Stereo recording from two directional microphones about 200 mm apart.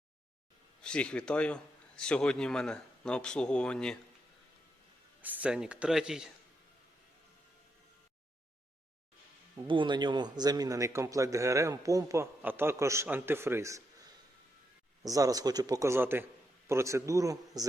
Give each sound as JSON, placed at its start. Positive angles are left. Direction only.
{"t": 0.8, "sound": "a man's voice", "side_deg": 5}
{"t": 5.2, "sound": "a man's voice", "side_deg": -10}
{"t": 9.6, "sound": "a man's voice", "side_deg": -25}